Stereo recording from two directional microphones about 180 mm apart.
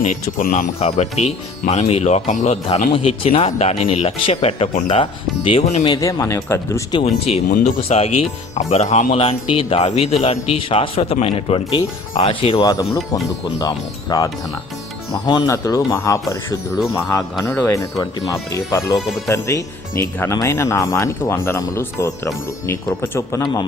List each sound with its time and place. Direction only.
0.3 s speech: 50° left (ahead or behind)
0.8 s speech: 35° left (ahead or behind)
2.6 s speech: 30° left (ahead or behind)
5.8 s speech: 20° left (ahead or behind)
6.9 s speech: 35° left (ahead or behind)
12.6 s speech: 20° left (ahead or behind)
15.3 s speech: 20° left (ahead or behind)